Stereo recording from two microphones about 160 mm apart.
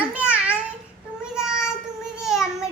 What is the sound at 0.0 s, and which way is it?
Babbling, 10° right (ahead or behind).